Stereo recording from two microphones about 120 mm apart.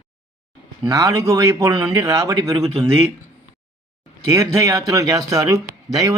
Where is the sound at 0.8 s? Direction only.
30° right (ahead or behind).